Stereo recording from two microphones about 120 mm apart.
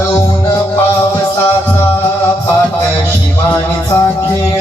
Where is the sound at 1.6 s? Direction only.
20° left (ahead or behind).